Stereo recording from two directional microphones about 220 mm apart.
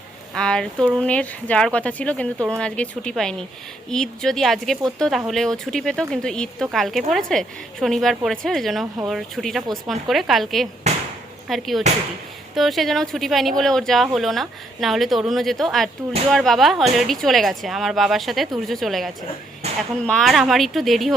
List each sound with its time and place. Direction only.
0.3 s speech: 5° left (ahead or behind)
19.6 s a sound: 30° right (ahead or behind)
20.1 s speech: centre (ahead or behind)